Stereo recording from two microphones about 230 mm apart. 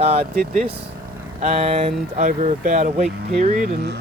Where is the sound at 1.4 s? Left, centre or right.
Right.